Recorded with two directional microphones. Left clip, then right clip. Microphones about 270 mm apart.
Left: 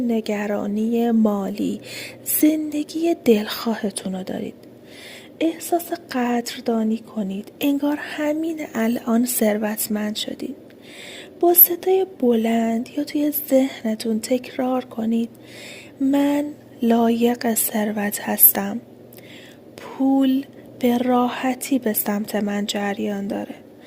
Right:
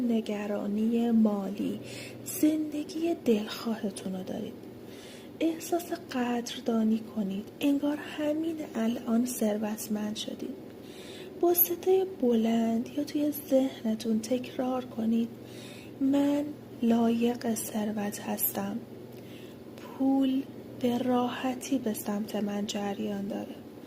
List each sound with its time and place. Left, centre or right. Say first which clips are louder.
0.1 s a woman's voice: left 8 dB; left
19.8 s a woman's voice: left 8 dB; left